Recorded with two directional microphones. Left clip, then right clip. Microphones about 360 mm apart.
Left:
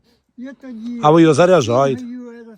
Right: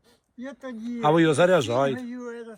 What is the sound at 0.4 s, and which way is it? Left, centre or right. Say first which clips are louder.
Speech: left 2 dB; centre.